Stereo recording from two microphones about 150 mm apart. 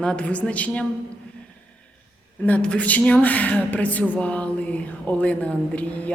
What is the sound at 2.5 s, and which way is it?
A woman's voice, 10° left (ahead or behind).